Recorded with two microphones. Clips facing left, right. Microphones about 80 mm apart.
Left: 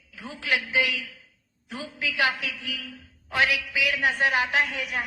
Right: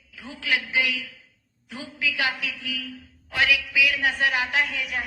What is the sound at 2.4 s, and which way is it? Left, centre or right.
A man's voice, left.